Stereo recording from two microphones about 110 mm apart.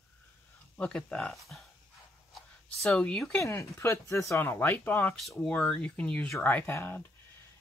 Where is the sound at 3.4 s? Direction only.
25° left (ahead or behind).